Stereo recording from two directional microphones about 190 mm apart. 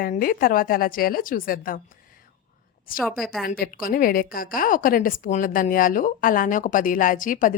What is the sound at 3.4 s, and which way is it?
A woman's voice, 50° left (ahead or behind).